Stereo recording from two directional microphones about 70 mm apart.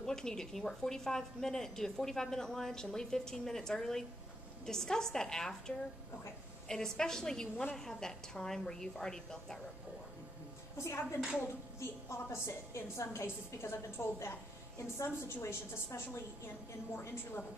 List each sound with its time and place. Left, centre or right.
0.0 s a woman's voice: centre
10.8 s a woman's voice: left